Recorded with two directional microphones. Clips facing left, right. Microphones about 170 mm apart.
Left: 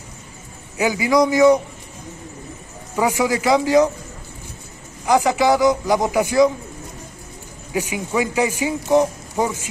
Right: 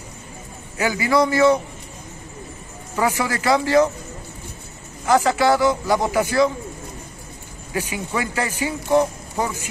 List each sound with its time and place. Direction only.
0.7 s speech: 10° left (ahead or behind)
3.0 s speech: 15° left (ahead or behind)
5.0 s speech: 15° left (ahead or behind)
7.7 s speech: 15° left (ahead or behind)